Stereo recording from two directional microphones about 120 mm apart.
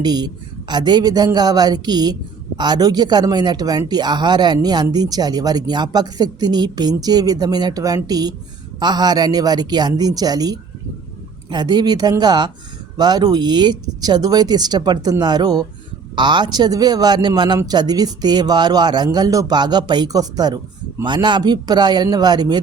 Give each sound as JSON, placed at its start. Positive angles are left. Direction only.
{"t": 0.0, "sound": "speech", "side_deg": -35}